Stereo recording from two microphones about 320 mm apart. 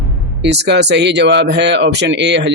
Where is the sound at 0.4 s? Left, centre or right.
Right.